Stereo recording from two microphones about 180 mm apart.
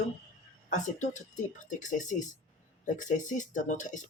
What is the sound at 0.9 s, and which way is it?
Speech, 40° left (ahead or behind).